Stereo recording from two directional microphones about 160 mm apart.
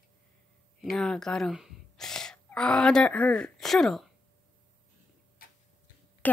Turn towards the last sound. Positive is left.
turn(degrees=65)  # may be behind; listen again after turning